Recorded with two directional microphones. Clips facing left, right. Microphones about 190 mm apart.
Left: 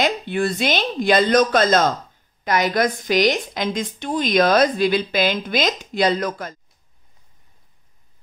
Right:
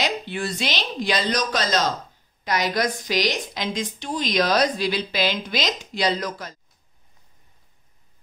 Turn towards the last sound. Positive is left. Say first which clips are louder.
# left 4 dB
turn(degrees=50)  # may be behind; listen again after turning